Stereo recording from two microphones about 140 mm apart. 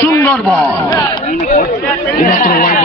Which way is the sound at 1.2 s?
60° left (ahead or behind).